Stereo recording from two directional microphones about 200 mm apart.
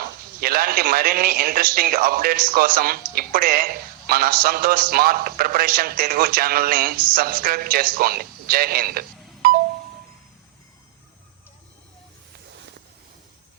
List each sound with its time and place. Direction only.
0.0 s speech: 50° right (ahead or behind)